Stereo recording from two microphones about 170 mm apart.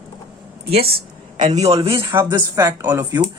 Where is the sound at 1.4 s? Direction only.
40° right (ahead or behind).